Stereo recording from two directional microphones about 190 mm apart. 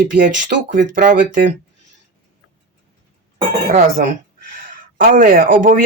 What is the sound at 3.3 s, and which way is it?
Speech, 40° right (ahead or behind).